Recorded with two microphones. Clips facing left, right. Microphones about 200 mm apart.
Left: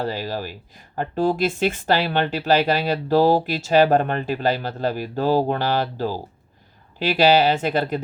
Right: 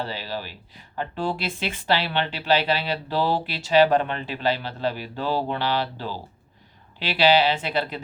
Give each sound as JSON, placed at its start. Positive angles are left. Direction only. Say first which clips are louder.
{"t": 0.0, "sound": "speech", "louder": "left 5 dB", "side_deg": 45}